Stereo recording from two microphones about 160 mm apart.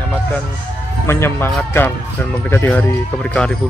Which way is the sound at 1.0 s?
15° left (ahead or behind).